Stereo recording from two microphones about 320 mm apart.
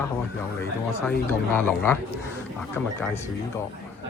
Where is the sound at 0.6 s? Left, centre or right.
Centre.